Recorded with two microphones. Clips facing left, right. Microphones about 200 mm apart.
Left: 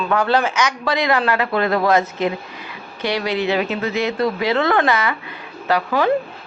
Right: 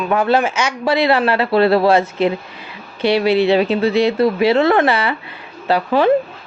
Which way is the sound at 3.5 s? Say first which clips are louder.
Right 6 dB; 30° right (ahead or behind).